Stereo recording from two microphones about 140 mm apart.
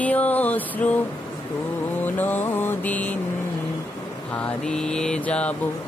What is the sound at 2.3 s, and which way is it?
Music, 15° left (ahead or behind).